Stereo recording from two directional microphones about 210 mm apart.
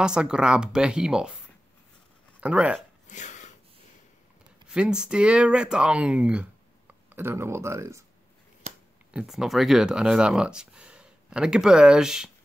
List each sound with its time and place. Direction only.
0.0 s speech: 5° right (ahead or behind)
2.4 s speech: 5° right (ahead or behind)
3.1 s a sound: 35° left (ahead or behind)
4.6 s speech: 5° right (ahead or behind)
9.1 s speech: centre (ahead or behind)